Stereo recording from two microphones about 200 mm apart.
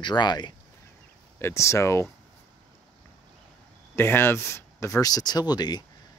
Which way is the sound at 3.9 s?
10° left (ahead or behind).